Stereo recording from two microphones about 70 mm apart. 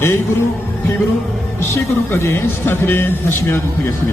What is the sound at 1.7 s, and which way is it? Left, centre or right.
A man's voice, left.